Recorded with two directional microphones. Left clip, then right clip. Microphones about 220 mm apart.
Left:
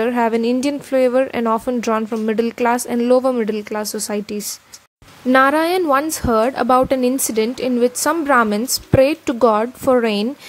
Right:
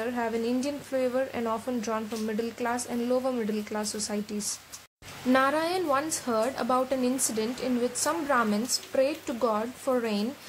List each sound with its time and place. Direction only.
0.0 s a woman's voice: 40° left (ahead or behind)